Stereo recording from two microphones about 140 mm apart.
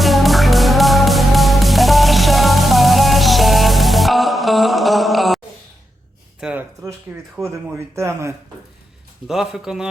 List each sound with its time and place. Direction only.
0.0 s music: centre (ahead or behind)
6.4 s a sound: 10° right (ahead or behind)
7.1 s a man's voice: 15° right (ahead or behind)
9.2 s a man's voice: centre (ahead or behind)